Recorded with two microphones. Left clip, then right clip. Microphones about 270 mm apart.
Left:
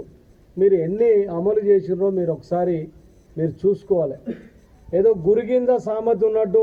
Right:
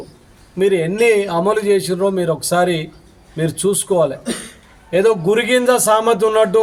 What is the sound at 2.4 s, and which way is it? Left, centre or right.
Music, left.